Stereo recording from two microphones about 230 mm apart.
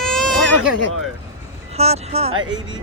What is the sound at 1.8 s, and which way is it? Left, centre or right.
Speech, right.